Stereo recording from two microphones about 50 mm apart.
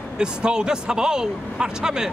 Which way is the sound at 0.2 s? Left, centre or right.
Centre.